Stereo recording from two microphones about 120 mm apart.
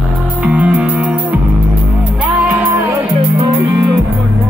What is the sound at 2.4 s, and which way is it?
Music, 15° right (ahead or behind).